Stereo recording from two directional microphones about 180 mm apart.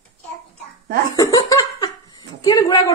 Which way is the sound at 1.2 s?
20° left (ahead or behind).